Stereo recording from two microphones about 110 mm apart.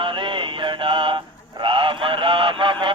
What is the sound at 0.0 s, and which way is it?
Mantra, 50° right (ahead or behind).